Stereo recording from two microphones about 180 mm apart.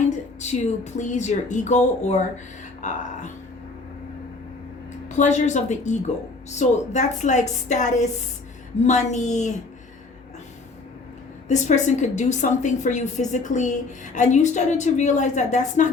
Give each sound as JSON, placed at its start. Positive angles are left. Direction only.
{"t": 0.3, "sound": "a woman's voice", "side_deg": 40}
{"t": 5.0, "sound": "a woman's voice", "side_deg": 40}
{"t": 11.4, "sound": "a woman's voice", "side_deg": 40}